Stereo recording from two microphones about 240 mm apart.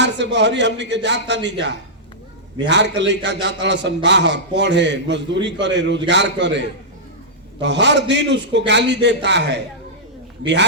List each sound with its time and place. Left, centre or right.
0.0 s a man's voice: right